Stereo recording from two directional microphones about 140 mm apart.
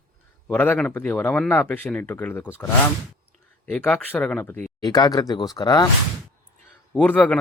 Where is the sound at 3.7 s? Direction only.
10° left (ahead or behind).